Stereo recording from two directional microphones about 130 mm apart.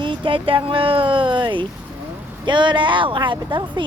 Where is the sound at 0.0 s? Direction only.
40° right (ahead or behind).